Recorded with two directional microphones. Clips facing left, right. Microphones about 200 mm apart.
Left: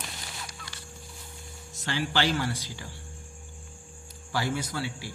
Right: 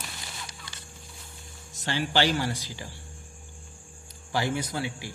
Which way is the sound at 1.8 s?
20° right (ahead or behind).